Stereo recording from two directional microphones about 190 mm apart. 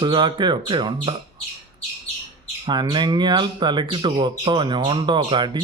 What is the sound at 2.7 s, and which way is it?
Speech, 25° right (ahead or behind).